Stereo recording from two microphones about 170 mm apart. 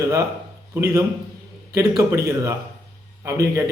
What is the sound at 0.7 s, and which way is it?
A man's voice, 15° right (ahead or behind).